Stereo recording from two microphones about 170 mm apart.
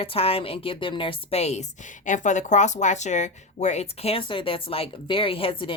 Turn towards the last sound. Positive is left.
turn(degrees=30)  # may be behind; listen again after turning